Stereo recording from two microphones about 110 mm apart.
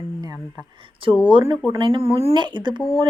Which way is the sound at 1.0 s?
55° right (ahead or behind).